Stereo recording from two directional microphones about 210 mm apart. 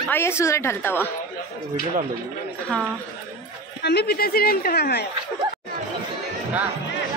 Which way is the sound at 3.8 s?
50° left (ahead or behind).